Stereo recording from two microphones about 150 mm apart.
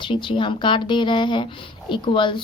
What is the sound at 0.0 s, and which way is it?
Speech, 35° left (ahead or behind).